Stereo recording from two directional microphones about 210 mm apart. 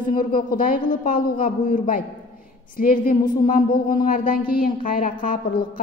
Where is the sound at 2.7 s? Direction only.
40° left (ahead or behind).